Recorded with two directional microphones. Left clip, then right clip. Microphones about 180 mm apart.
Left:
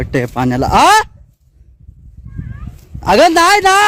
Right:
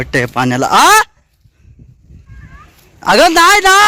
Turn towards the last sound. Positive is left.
turn(degrees=20)  # may be behind; listen again after turning